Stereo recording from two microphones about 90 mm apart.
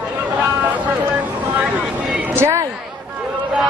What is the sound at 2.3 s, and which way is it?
Speech, 30° right (ahead or behind).